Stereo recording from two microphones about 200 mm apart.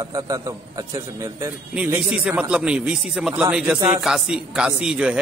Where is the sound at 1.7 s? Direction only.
5° right (ahead or behind).